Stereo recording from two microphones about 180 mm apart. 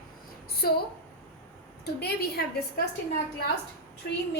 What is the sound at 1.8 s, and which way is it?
Speech, 65° left (ahead or behind).